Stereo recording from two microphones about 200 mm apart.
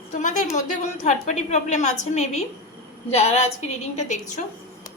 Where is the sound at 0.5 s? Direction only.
35° left (ahead or behind).